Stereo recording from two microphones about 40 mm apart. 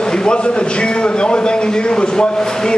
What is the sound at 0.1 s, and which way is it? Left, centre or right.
Speech, left.